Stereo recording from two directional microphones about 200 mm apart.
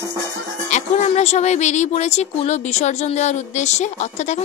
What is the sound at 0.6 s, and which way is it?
Speech, 35° left (ahead or behind).